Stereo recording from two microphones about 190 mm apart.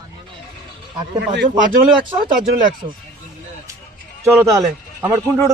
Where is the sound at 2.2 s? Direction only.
25° right (ahead or behind).